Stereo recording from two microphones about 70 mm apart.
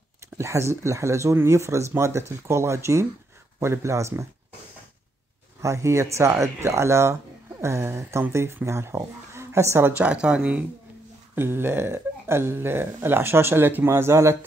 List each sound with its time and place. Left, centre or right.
0.4 s speech: right
5.6 s speech: right
9.9 s a woman's voice: centre
11.3 s speech: right